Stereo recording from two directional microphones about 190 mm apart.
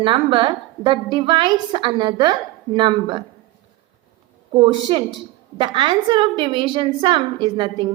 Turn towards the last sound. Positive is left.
turn(degrees=-25)  # may be behind; listen again after turning